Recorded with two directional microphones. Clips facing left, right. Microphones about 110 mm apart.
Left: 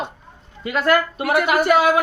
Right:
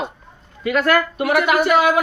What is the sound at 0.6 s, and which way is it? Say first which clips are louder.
A man's voice: right 1 dB; 30° left (ahead or behind).